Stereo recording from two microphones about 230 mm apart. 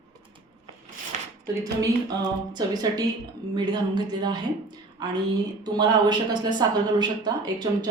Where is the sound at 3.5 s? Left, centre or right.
Centre.